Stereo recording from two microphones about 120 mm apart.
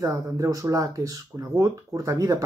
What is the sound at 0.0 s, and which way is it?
Speech, 25° right (ahead or behind).